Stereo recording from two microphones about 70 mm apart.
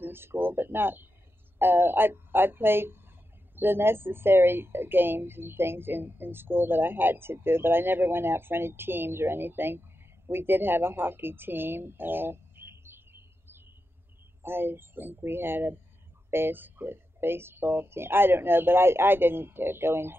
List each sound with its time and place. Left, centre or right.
0.0 s speech: right